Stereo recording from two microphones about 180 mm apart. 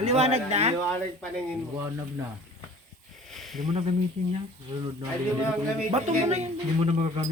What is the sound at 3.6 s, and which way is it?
Speech, 40° right (ahead or behind).